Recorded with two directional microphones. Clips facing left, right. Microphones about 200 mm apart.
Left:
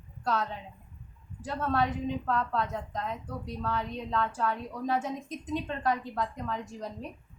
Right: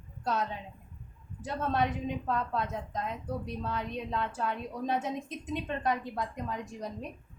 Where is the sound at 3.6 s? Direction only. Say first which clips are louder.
Left 2 dB; 20° right (ahead or behind).